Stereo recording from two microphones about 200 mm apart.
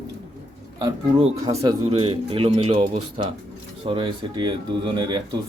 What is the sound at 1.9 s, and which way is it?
Speech, 30° right (ahead or behind).